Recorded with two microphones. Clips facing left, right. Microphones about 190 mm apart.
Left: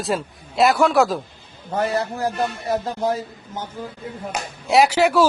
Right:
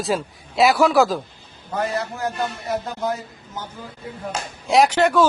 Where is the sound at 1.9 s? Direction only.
35° left (ahead or behind).